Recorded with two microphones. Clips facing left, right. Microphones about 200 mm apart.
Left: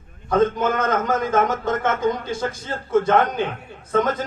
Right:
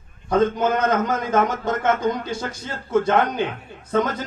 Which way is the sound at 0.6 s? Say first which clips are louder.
Right 1 dB; 50° left (ahead or behind).